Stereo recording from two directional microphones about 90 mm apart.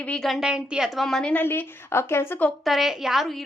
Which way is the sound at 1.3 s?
20° left (ahead or behind).